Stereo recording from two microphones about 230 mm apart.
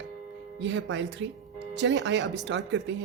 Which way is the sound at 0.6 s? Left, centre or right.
Right.